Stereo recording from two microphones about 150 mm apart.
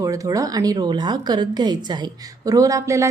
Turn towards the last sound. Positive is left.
turn(degrees=-20)  # may be behind; listen again after turning